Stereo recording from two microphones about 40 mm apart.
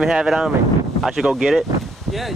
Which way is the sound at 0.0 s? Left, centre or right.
Centre.